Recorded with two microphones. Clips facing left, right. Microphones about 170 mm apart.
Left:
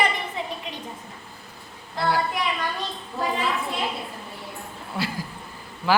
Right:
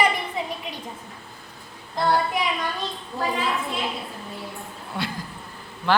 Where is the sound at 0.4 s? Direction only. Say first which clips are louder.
Right 2 dB; 10° right (ahead or behind).